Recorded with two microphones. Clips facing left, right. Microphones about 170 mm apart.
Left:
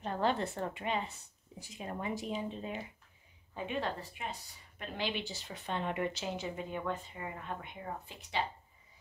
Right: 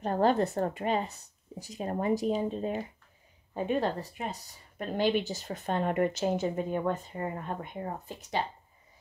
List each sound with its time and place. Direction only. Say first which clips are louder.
0.0 s a woman's voice: right 7 dB; 45° right (ahead or behind)